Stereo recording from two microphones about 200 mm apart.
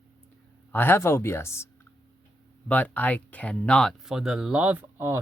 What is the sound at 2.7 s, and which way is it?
Speech, 10° left (ahead or behind).